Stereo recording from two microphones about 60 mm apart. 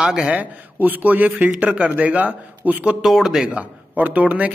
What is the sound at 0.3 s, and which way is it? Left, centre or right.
A man's voice, right.